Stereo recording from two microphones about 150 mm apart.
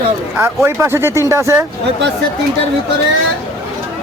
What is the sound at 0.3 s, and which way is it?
Speech, 15° right (ahead or behind).